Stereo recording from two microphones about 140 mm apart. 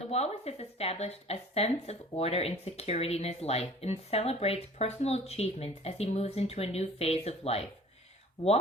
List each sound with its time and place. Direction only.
0.1 s speech: 50° left (ahead or behind)